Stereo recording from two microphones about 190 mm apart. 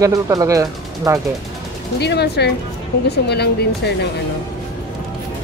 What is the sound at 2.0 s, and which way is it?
Speech, 60° left (ahead or behind).